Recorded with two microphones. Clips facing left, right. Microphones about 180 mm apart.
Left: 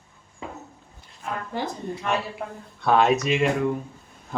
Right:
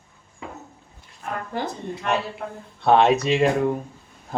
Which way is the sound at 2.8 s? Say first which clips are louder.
Right 3 dB; 25° right (ahead or behind).